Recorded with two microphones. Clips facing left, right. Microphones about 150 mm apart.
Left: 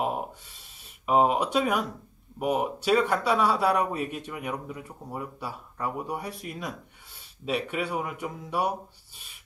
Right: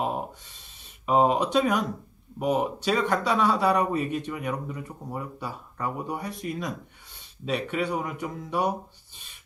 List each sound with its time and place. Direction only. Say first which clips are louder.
1.0 s a man's voice: right 1 dB; 5° left (ahead or behind)